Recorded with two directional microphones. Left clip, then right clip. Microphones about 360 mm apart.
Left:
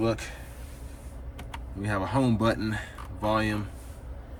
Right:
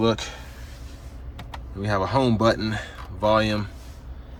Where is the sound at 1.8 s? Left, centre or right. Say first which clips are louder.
Right 6 dB; centre.